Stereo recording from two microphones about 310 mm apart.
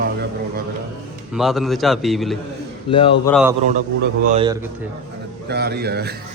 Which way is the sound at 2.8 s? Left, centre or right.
Centre.